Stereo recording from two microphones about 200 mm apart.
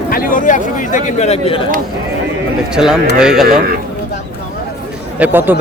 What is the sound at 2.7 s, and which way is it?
Speech, 5° right (ahead or behind).